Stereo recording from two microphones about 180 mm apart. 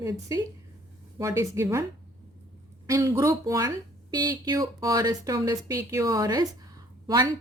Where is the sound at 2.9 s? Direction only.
15° right (ahead or behind).